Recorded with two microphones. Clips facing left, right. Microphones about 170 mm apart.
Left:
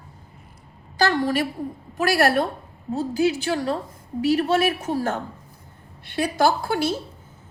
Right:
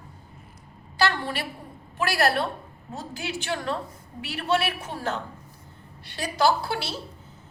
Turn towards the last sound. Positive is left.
turn(degrees=45)  # may be behind; listen again after turning